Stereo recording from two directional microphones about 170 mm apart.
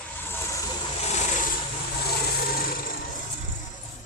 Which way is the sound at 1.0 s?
40° left (ahead or behind).